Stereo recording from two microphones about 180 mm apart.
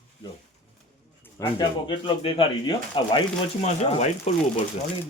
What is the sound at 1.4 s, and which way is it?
Speech, 25° left (ahead or behind).